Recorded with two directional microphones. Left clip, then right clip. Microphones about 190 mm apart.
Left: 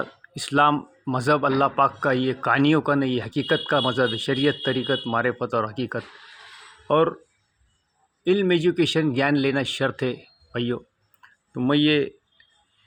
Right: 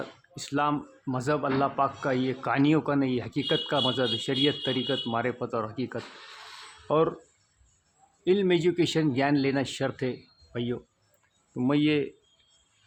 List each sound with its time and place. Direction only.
0.3 s speech: 30° left (ahead or behind)
8.2 s speech: 15° left (ahead or behind)